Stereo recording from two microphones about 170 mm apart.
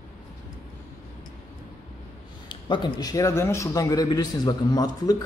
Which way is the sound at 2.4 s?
25° left (ahead or behind).